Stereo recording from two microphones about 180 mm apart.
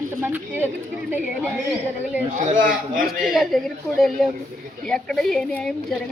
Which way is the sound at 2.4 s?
50° right (ahead or behind).